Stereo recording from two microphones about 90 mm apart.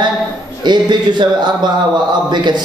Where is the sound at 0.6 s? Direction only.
55° right (ahead or behind).